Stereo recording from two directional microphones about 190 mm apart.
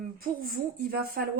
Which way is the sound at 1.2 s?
55° right (ahead or behind).